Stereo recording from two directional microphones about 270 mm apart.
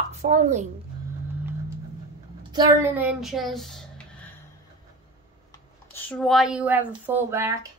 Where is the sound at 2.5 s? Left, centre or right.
Centre.